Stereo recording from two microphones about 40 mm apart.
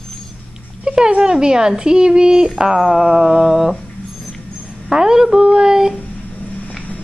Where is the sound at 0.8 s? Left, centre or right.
Right.